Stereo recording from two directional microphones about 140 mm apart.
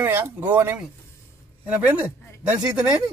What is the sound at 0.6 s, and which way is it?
Speech, 15° right (ahead or behind).